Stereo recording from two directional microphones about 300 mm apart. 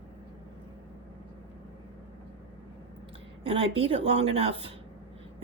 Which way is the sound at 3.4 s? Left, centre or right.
Centre.